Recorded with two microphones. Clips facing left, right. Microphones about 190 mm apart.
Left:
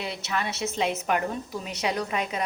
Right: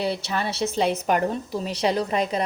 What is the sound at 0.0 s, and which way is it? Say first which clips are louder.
A woman's voice: right 5 dB; 35° right (ahead or behind).